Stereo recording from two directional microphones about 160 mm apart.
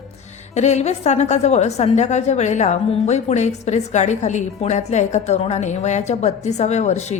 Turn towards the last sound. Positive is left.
turn(degrees=45)  # may be behind; listen again after turning